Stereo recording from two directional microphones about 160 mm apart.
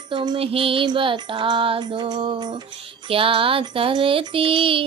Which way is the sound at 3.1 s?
35° right (ahead or behind).